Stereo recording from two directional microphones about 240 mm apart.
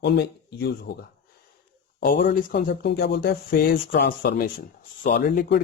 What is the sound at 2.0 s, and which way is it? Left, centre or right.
Speech, left.